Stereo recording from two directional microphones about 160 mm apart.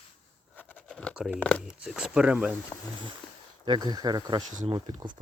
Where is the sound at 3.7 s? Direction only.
25° right (ahead or behind).